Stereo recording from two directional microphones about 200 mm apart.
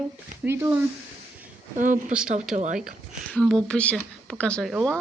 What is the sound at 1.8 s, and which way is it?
Speech, 40° right (ahead or behind).